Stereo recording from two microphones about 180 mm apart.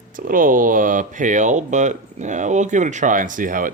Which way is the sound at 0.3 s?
50° right (ahead or behind).